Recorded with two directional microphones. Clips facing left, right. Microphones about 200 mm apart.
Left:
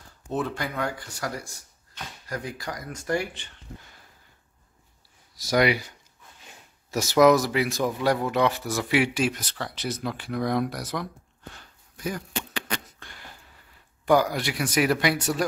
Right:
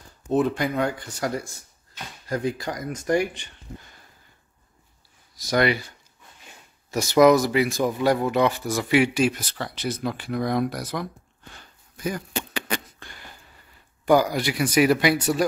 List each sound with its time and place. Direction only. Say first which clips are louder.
0.3 s speech: right 7 dB; 20° right (ahead or behind)
5.4 s speech: even; 10° left (ahead or behind)
11.5 s a sound: right 1 dB; centre (ahead or behind)
14.0 s speech: right 2 dB; centre (ahead or behind)